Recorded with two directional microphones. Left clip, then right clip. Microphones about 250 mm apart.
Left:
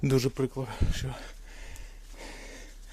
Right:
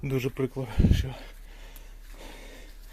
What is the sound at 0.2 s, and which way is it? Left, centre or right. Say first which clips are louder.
Speech: left 1 dB; centre.